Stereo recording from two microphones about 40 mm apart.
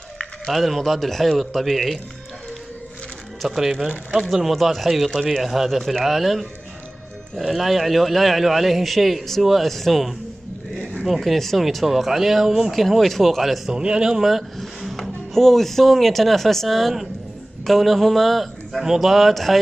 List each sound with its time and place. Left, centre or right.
0.5 s a man's voice: centre
3.4 s speech: centre
4.5 s a man's voice: centre
13.7 s a man's voice: right
14.6 s a man's voice: centre